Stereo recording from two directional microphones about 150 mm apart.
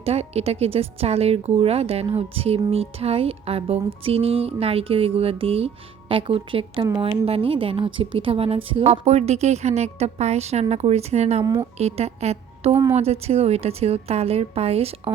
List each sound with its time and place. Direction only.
0.0 s a woman's voice: 45° right (ahead or behind)